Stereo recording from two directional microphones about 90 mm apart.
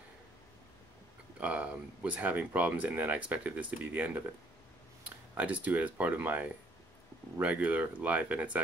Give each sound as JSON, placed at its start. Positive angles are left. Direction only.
{"t": 1.4, "sound": "speech", "side_deg": -15}
{"t": 5.3, "sound": "speech", "side_deg": -15}